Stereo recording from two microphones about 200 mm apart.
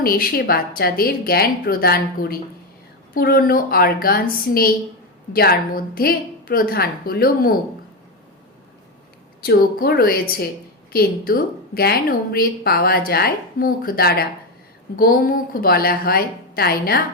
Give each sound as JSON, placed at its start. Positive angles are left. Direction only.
{"t": 0.0, "sound": "a woman's voice", "side_deg": 50}
{"t": 9.4, "sound": "a woman's voice", "side_deg": 50}